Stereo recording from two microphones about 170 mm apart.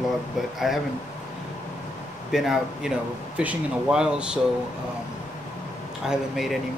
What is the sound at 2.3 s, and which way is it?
Speech, centre (ahead or behind).